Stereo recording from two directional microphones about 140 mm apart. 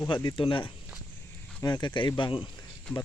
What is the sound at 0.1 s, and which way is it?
Speech, 35° left (ahead or behind).